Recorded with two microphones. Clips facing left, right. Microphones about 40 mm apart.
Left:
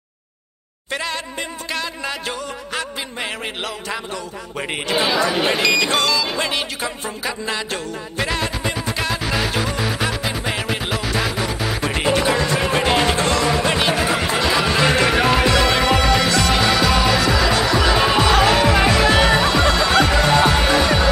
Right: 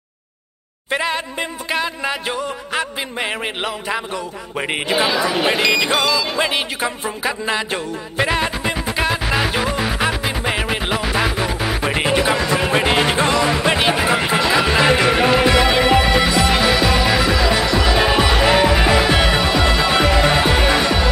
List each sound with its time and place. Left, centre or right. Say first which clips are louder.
0.8 s speech: right 4 dB; centre
4.9 s music: even; centre